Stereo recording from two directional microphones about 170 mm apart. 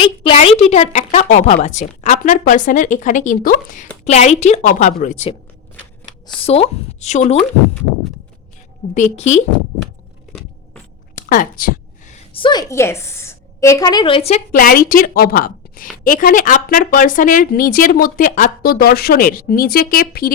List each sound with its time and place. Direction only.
0.0 s a woman's voice: 30° left (ahead or behind); by 3.8 s 55° left (ahead or behind)
4.0 s a woman's voice: 40° left (ahead or behind)
9.0 s a woman's voice: 45° left (ahead or behind)
11.1 s a sound: 55° left (ahead or behind)
12.3 s a woman's voice: 30° left (ahead or behind)
14.5 s a woman's voice: 55° left (ahead or behind)